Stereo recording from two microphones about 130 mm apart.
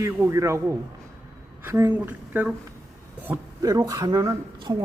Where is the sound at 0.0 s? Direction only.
25° right (ahead or behind).